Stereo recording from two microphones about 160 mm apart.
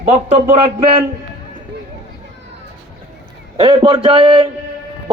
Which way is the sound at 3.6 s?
35° right (ahead or behind).